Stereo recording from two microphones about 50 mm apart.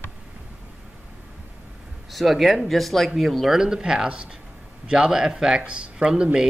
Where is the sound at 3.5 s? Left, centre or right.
Centre.